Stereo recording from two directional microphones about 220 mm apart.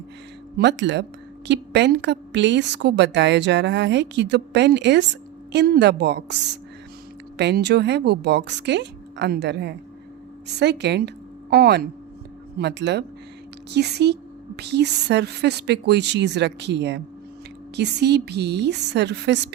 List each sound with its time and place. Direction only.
0.5 s a woman's voice: 50° right (ahead or behind)